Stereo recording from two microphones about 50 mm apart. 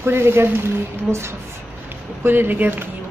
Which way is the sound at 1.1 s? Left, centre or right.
Right.